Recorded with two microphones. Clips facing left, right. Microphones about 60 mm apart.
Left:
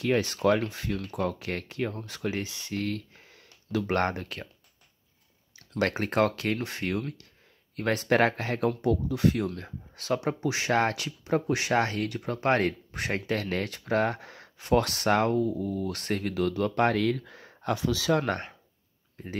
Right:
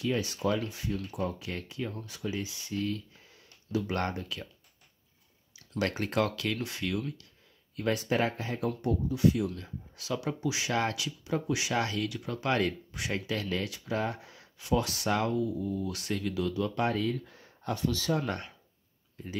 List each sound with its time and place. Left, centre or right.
0.0 s speech: left
5.6 s speech: left
7.7 s speech: left
18.2 s speech: left